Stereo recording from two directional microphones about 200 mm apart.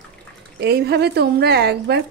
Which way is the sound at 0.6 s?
55° right (ahead or behind).